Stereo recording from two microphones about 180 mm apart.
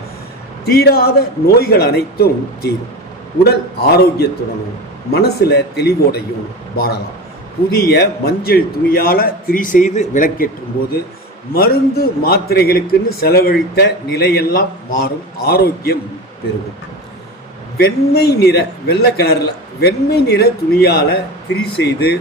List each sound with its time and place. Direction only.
0.6 s a man's voice: 60° left (ahead or behind)
11.5 s a man's voice: 55° left (ahead or behind)
17.7 s a man's voice: 60° left (ahead or behind)